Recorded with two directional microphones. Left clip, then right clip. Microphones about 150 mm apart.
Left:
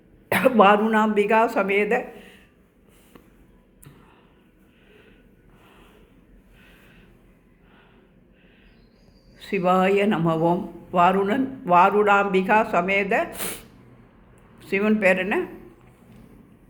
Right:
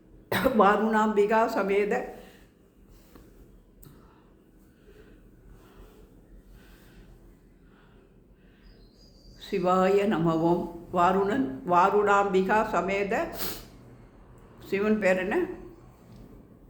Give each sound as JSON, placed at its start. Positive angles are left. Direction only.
{"t": 0.3, "sound": "speech", "side_deg": 25}
{"t": 9.4, "sound": "speech", "side_deg": 20}
{"t": 14.6, "sound": "speech", "side_deg": 25}